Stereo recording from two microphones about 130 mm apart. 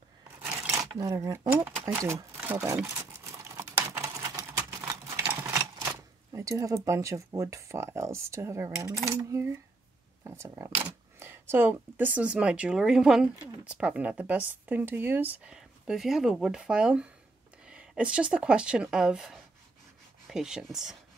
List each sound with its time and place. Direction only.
0.4 s scissors: 20° right (ahead or behind)
0.9 s speech: 25° right (ahead or behind)
2.0 s a sound: 25° right (ahead or behind)
9.1 s speech: 20° right (ahead or behind); by 20.9 s 5° right (ahead or behind)